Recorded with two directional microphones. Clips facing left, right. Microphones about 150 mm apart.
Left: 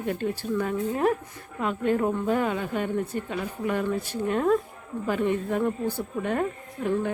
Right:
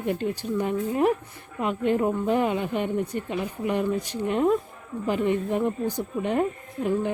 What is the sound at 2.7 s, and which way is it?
Speech, 45° left (ahead or behind).